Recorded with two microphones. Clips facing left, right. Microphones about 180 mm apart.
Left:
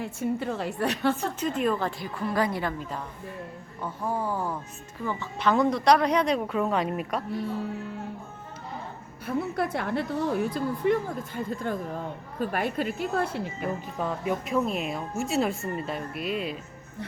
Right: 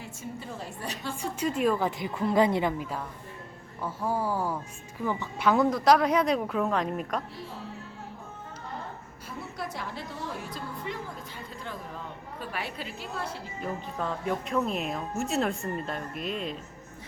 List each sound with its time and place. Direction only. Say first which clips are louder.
0.0 s a woman's voice: left 11 dB; 65° left (ahead or behind)
1.1 s a woman's voice: left 1 dB; 10° right (ahead or behind)
2.0 s a woman's voice: right 3 dB; 20° right (ahead or behind)
3.8 s a woman's voice: even; 5° right (ahead or behind)
9.2 s a woman's voice: left 10 dB; 60° left (ahead or behind)
14.0 s speech: left 2 dB; 5° left (ahead or behind)